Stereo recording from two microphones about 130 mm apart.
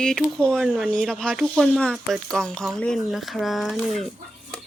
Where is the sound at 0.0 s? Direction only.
5° left (ahead or behind).